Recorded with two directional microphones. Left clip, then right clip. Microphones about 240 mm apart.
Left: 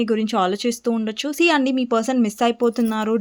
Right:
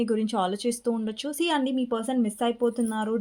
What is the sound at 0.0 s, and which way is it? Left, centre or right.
Speech, left.